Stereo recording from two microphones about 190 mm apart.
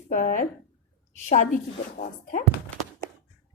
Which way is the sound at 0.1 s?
45° left (ahead or behind).